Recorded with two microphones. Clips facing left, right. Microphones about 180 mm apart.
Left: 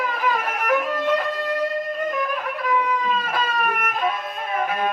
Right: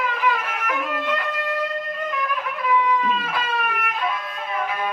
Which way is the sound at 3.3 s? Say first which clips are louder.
Left 2 dB; 45° left (ahead or behind).